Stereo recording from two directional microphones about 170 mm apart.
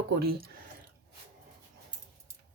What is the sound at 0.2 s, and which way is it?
Speech, 60° right (ahead or behind).